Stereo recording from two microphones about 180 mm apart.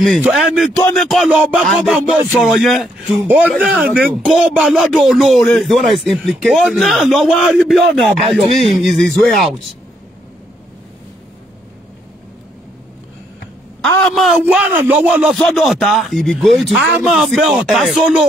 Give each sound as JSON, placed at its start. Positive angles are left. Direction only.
{"t": 0.2, "sound": "a man's voice", "side_deg": -5}
{"t": 13.7, "sound": "a man's voice", "side_deg": 0}